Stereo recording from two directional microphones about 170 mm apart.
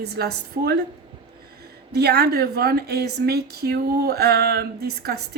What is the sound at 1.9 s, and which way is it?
A woman's voice, 70° right (ahead or behind).